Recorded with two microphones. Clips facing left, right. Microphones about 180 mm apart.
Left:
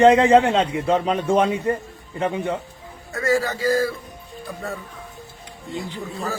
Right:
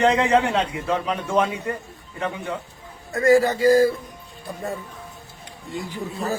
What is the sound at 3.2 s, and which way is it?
Speech, 15° right (ahead or behind).